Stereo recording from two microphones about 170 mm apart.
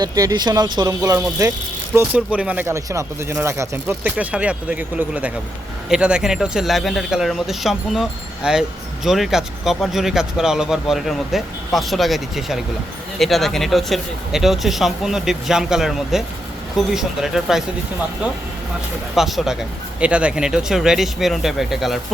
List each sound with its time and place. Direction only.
0.0 s speech: 20° right (ahead or behind); by 17.6 s centre (ahead or behind)
19.1 s speech: centre (ahead or behind)